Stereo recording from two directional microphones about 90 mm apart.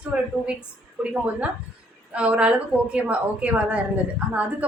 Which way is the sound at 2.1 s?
15° right (ahead or behind).